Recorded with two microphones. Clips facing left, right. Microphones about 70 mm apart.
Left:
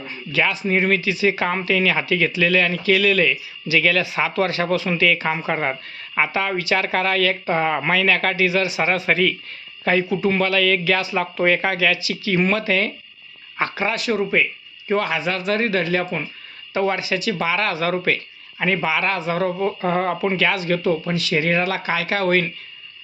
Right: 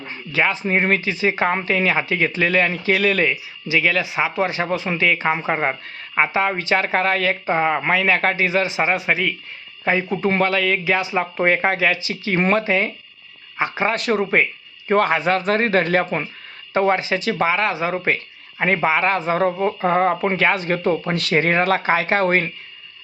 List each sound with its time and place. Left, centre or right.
0.0 s speech: right
3.8 s speech: right
10.1 s speech: right
12.6 s speech: right
13.8 s speech: right
17.6 s speech: right
18.6 s speech: right